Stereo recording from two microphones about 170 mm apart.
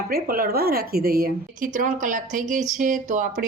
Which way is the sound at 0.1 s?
60° right (ahead or behind).